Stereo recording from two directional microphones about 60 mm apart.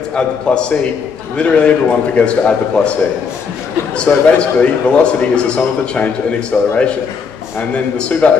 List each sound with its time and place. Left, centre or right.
0.1 s a man's voice: centre
7.7 s a man's voice: left